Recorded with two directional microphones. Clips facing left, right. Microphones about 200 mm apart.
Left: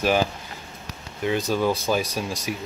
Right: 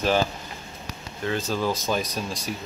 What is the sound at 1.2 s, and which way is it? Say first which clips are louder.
Speech: left 3 dB; 15° left (ahead or behind).